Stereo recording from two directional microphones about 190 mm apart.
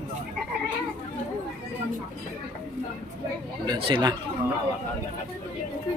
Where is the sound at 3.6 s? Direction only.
20° right (ahead or behind).